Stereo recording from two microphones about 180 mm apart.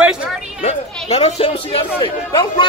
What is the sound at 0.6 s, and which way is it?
Speech, 35° left (ahead or behind).